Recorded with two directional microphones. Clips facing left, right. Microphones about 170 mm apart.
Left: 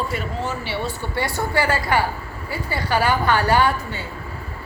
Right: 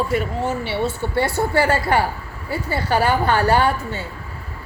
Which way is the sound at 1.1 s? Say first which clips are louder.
Right 3 dB; 30° right (ahead or behind).